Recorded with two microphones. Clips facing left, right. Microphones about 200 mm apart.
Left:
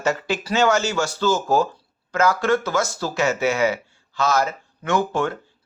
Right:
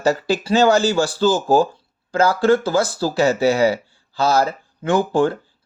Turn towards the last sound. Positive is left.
turn(degrees=-30)  # may be behind; listen again after turning